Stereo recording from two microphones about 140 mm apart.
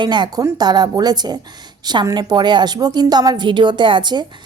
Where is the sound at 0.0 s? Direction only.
30° right (ahead or behind).